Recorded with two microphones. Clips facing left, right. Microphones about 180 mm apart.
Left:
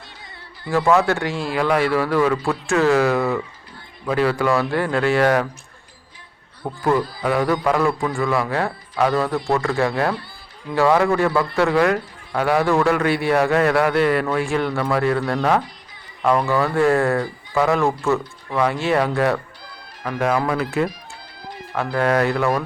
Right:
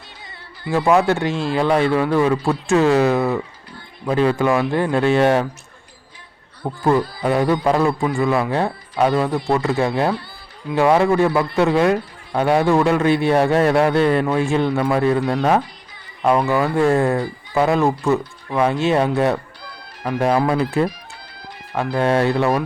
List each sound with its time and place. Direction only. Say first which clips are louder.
0.7 s a man's voice: right 1 dB; 20° right (ahead or behind)
6.8 s a man's voice: right 2 dB; 25° right (ahead or behind)
20.5 s fowl: right 3 dB; 30° right (ahead or behind)
21.8 s a man's voice: right 1 dB; 25° right (ahead or behind)